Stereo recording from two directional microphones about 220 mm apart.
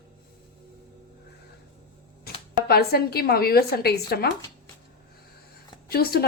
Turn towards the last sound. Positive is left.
turn(degrees=45)  # may be behind; listen again after turning